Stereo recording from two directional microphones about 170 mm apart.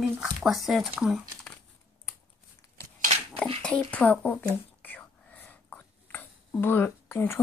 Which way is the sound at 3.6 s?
5° left (ahead or behind).